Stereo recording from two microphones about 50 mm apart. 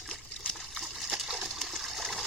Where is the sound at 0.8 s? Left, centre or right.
Centre.